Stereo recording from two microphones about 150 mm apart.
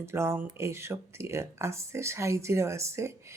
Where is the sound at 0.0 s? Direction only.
15° right (ahead or behind).